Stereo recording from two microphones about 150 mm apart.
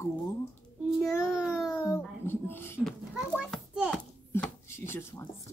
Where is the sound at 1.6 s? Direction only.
20° left (ahead or behind).